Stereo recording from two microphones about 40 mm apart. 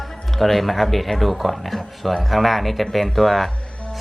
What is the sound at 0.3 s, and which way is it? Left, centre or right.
Speech, centre.